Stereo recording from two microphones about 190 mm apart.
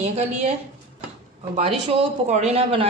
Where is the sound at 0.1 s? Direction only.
35° right (ahead or behind).